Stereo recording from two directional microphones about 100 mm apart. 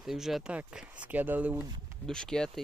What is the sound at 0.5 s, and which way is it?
Speech, 15° right (ahead or behind).